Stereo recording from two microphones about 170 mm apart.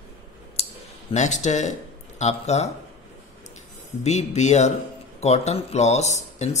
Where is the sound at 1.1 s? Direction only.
45° left (ahead or behind).